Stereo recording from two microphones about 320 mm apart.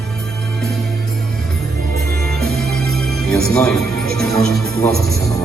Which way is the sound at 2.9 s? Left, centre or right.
Centre.